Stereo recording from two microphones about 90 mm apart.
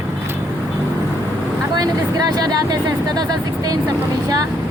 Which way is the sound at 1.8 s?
45° right (ahead or behind).